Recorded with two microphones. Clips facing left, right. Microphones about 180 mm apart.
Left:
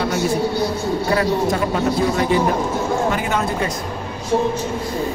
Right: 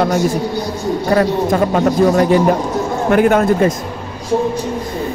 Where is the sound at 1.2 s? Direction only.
45° right (ahead or behind).